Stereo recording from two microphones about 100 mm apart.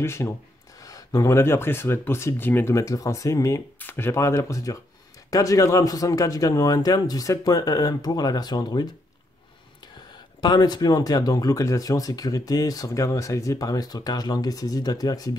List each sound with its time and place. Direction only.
0.0 s speech: 25° left (ahead or behind)
3.8 s speech: 20° left (ahead or behind); by 8.8 s 45° left (ahead or behind)
9.9 s speech: 45° left (ahead or behind)